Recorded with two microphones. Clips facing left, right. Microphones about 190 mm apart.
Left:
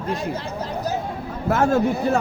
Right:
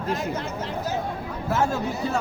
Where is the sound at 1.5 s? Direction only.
55° left (ahead or behind).